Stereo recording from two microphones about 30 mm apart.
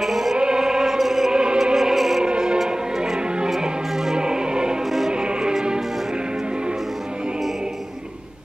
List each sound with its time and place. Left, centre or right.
0.0 s music: centre
0.4 s music: right
0.9 s music: centre
1.3 s music: right
1.6 s music: centre
2.0 s music: centre
2.2 s music: right
4.2 s music: right